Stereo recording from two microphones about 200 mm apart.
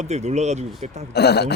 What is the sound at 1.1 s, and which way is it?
Speech, 55° left (ahead or behind).